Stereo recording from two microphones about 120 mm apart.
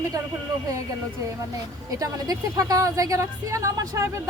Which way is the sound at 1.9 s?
30° right (ahead or behind).